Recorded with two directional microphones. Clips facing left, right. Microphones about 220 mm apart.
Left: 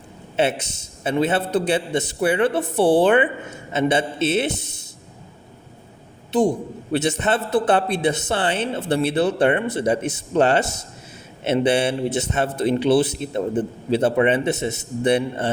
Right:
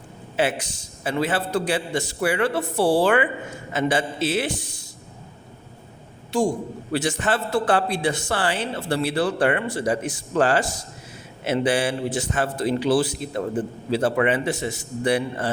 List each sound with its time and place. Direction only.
0.3 s a man's voice: 25° left (ahead or behind)
6.3 s a man's voice: 20° left (ahead or behind)